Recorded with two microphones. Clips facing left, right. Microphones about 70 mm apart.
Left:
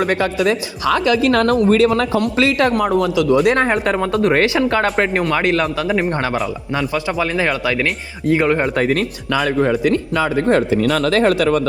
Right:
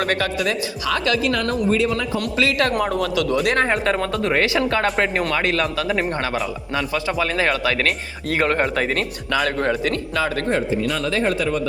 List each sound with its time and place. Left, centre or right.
0.2 s speech: left
1.2 s speech: left
2.2 s speech: left
2.9 s speech: centre
4.4 s speech: left; by 8.6 s centre
8.8 s speech: centre
10.5 s speech: left